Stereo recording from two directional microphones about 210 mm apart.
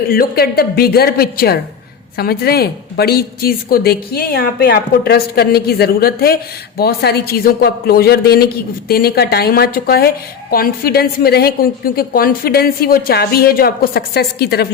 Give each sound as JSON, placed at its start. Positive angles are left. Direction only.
{"t": 0.1, "sound": "a woman's voice", "side_deg": 45}